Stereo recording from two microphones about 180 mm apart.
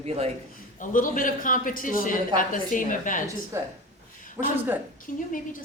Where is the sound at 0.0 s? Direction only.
35° right (ahead or behind).